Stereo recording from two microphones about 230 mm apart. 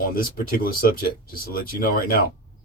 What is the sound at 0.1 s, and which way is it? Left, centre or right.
Speech, left.